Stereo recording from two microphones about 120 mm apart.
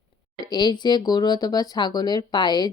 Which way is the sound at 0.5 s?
35° left (ahead or behind).